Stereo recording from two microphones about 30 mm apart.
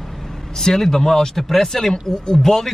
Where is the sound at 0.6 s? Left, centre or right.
Centre.